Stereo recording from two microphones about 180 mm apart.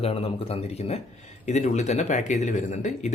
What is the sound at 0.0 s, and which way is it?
A man's voice, 30° left (ahead or behind).